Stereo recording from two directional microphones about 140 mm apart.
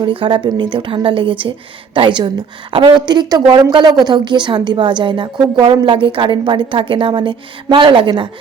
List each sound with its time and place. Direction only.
0.0 s a woman's voice: 40° right (ahead or behind)